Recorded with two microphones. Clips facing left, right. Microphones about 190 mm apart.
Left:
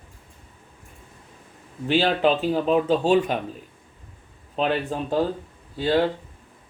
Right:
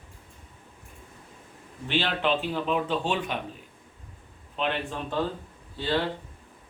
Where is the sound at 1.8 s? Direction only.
40° left (ahead or behind).